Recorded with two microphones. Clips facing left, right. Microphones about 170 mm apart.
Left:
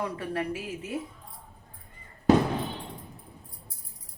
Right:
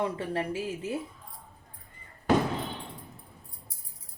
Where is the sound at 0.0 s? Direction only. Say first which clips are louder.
Right 1 dB; 25° right (ahead or behind).